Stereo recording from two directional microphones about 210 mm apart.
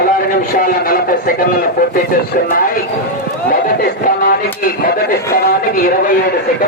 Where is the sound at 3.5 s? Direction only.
45° left (ahead or behind).